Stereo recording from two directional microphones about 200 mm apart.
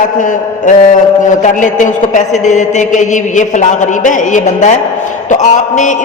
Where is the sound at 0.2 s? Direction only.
40° left (ahead or behind).